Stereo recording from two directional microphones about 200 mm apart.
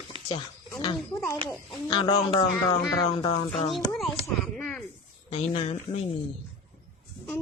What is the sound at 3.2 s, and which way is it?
Speech, 25° left (ahead or behind).